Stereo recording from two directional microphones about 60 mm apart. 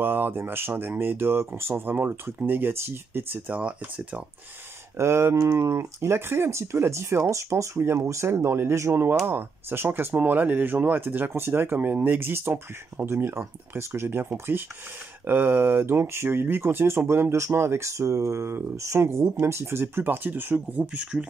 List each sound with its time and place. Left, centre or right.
0.0 s speech: right
3.5 s speech: right
4.9 s speech: right
5.4 s speech: right
18.9 s speech: right; by 21.3 s centre